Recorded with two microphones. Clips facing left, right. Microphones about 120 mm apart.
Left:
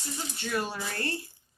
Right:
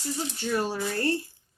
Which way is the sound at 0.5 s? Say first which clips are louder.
Right 4 dB; 30° right (ahead or behind).